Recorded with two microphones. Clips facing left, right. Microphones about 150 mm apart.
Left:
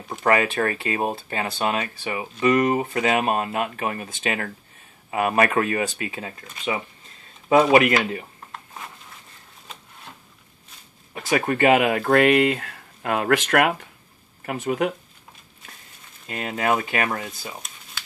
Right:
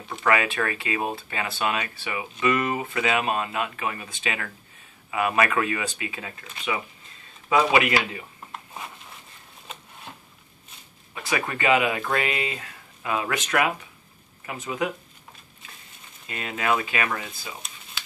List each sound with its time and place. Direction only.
0.1 s speech: 40° left (ahead or behind)
7.4 s speech: 45° left (ahead or behind)
11.2 s speech: 50° left (ahead or behind)
16.3 s speech: 45° left (ahead or behind)